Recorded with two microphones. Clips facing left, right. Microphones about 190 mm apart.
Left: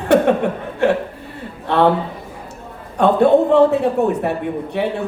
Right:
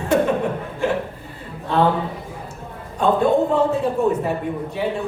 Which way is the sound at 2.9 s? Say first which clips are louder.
Left 5 dB; 70° left (ahead or behind).